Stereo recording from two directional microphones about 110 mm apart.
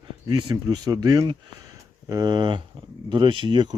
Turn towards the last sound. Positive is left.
turn(degrees=-45)  # may be behind; listen again after turning